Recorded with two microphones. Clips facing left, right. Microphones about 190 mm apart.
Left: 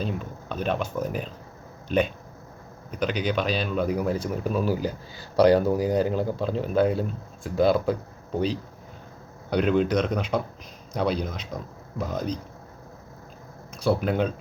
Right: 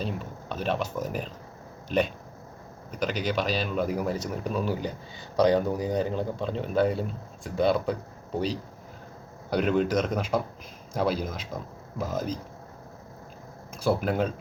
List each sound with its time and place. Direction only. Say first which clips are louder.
0.0 s speech: left 2 dB; centre (ahead or behind)
5.7 s speech: left 5 dB; 90° left
6.0 s speech: left 4 dB; 5° left (ahead or behind)
9.5 s speech: left 2 dB; centre (ahead or behind)
13.8 s speech: left 2 dB; centre (ahead or behind)